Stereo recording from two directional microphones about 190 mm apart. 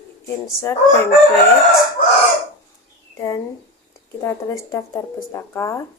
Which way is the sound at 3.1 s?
15° left (ahead or behind).